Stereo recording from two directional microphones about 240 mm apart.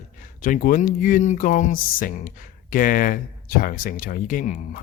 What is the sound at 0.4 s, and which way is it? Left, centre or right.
Speech, left.